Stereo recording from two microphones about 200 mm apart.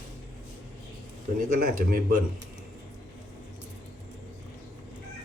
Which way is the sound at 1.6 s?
45° right (ahead or behind).